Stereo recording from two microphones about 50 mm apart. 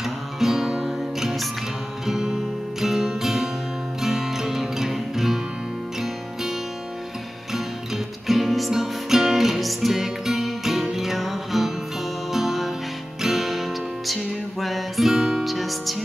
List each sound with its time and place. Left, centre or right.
0.0 s music: centre
7.5 s music: centre